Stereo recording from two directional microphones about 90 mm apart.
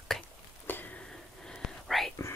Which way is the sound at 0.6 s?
20° left (ahead or behind).